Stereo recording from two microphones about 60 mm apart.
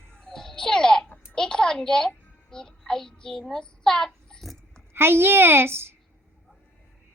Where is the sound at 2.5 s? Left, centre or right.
Centre.